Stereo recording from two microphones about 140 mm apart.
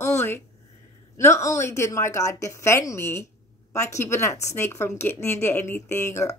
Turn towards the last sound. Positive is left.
turn(degrees=20)  # may be behind; listen again after turning